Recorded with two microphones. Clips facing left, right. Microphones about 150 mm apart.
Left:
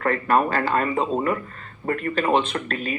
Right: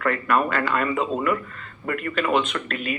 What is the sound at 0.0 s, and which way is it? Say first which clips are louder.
Speech: left 2 dB; 35° left (ahead or behind).